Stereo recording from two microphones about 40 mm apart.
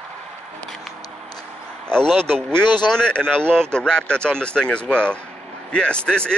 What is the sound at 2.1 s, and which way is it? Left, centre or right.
Speech, centre.